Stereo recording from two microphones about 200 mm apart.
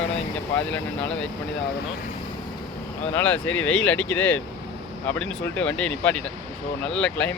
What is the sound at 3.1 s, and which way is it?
Speech, 10° left (ahead or behind).